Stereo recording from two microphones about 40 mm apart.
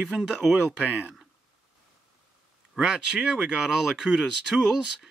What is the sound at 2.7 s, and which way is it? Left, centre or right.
Speech, centre.